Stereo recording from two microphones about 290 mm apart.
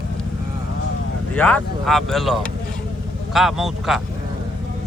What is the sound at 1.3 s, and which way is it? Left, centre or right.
Speech, centre.